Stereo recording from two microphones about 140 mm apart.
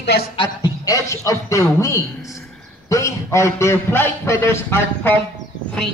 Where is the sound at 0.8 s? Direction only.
20° left (ahead or behind).